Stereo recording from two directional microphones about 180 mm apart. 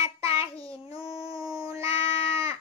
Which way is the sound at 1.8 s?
35° left (ahead or behind).